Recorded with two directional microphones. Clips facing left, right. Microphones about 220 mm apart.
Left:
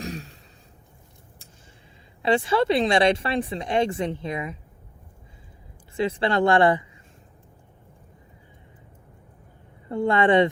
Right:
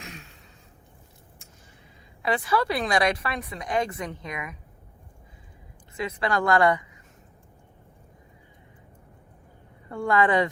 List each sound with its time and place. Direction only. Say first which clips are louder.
0.0 s a sound: left 10 dB; 35° left (ahead or behind)
2.2 s speech: left 4 dB; 25° left (ahead or behind)
6.0 s speech: left 5 dB; 30° left (ahead or behind)
9.9 s speech: left 3 dB; 25° left (ahead or behind)